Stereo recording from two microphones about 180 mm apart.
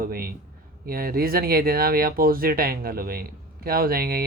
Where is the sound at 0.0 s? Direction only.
55° right (ahead or behind).